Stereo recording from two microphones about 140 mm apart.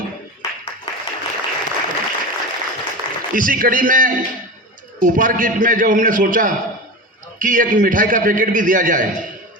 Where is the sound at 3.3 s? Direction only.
80° right.